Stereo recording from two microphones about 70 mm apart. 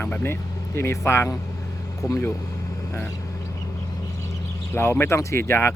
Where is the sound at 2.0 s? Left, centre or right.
Left.